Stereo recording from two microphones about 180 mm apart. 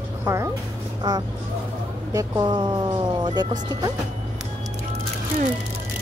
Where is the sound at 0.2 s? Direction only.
15° right (ahead or behind).